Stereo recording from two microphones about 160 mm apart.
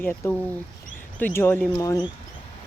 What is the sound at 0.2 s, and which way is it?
Speech, 15° left (ahead or behind).